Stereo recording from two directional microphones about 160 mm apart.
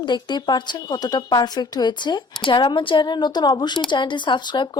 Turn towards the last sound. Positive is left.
turn(degrees=30)  # may be behind; listen again after turning